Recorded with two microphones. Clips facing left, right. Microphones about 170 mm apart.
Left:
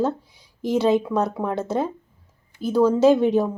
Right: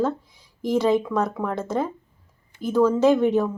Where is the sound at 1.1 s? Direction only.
15° left (ahead or behind).